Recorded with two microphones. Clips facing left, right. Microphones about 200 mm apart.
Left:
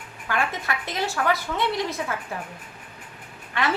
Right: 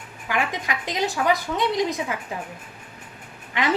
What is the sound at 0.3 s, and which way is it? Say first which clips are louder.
A woman's voice: right 1 dB; 15° right (ahead or behind).